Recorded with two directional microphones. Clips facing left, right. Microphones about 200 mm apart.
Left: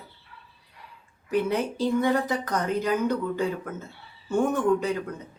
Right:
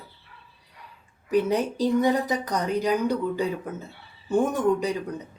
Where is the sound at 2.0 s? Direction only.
15° right (ahead or behind).